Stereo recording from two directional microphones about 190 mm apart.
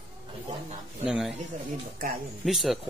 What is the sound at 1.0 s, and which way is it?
Speech, 5° right (ahead or behind).